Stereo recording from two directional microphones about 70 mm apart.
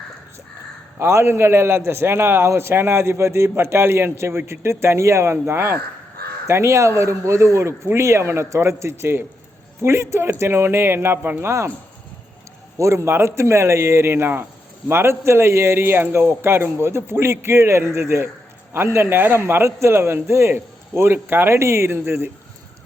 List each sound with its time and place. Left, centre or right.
0.9 s a man's voice: right
12.8 s a man's voice: right